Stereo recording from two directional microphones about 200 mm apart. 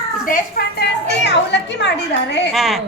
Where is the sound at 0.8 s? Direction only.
60° left (ahead or behind).